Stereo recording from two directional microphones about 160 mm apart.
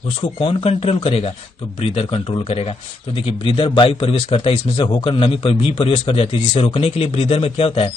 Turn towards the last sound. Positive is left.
turn(degrees=35)  # may be behind; listen again after turning